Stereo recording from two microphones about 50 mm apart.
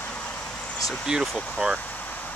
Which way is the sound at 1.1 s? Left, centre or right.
Centre.